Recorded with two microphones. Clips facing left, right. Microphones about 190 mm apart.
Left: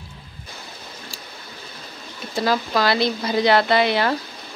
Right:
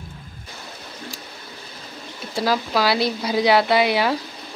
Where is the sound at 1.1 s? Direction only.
15° right (ahead or behind).